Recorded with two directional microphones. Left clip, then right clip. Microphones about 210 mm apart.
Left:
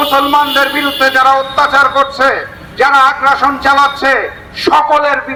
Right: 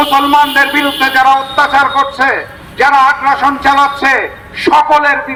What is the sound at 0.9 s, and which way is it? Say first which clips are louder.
A man's voice: left 1 dB; 20° left (ahead or behind).